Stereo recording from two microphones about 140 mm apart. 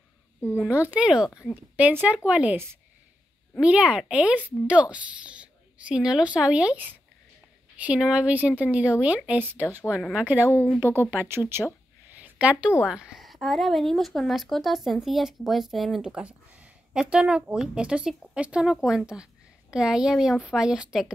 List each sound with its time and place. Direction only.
0.4 s a child's voice: 15° left (ahead or behind)
0.8 s a woman's voice: 10° right (ahead or behind)
12.2 s a sound: 10° right (ahead or behind)
12.8 s speech: 5° right (ahead or behind)